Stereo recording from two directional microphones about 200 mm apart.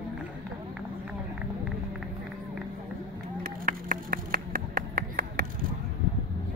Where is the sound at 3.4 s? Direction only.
45° right (ahead or behind).